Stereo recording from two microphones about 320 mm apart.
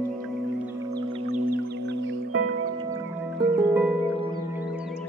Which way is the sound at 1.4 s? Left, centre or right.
Right.